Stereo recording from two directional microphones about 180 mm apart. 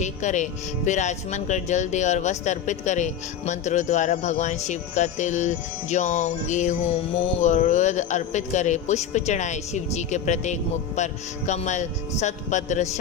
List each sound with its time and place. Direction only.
0.0 s speech: 40° left (ahead or behind)